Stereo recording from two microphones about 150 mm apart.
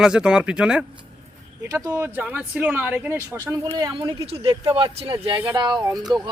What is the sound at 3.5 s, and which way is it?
Speech, 25° right (ahead or behind).